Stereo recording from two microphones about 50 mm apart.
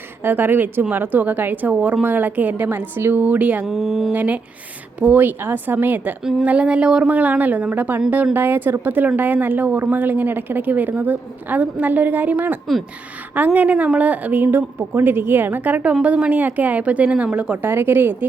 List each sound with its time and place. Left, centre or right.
0.2 s a woman's voice: right
1.7 s a woman's voice: right
3.2 s a woman's voice: right
3.7 s speech: centre
4.1 s a woman's voice: right
6.4 s speech: right
7.0 s a woman's voice: right
16.3 s a woman's voice: right
17.6 s a woman's voice: right